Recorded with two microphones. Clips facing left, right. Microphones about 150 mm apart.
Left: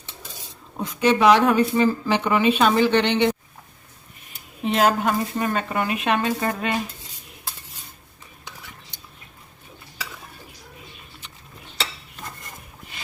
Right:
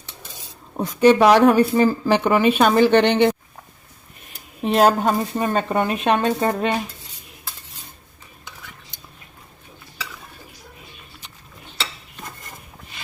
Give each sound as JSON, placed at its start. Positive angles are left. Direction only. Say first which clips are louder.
{"t": 0.8, "sound": "speech", "louder": "right 5 dB", "side_deg": -40}